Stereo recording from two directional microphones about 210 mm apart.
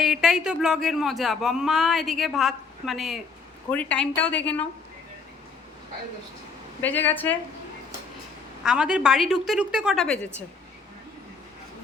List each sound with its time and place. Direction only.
0.0 s a woman's voice: centre (ahead or behind)
6.8 s a woman's voice: 10° left (ahead or behind)
8.6 s speech: 5° right (ahead or behind)